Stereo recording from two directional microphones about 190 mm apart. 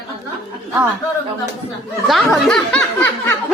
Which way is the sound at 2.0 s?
Centre (ahead or behind).